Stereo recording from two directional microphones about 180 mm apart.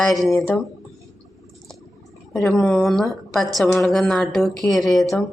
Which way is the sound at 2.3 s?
Centre (ahead or behind).